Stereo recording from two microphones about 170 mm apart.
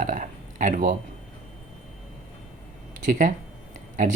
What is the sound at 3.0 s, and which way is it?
Speech, 50° right (ahead or behind).